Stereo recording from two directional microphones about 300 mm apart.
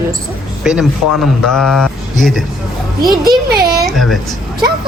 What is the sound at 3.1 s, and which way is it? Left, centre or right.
Speech, centre.